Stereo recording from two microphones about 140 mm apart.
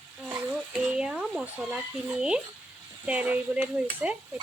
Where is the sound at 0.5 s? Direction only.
5° right (ahead or behind).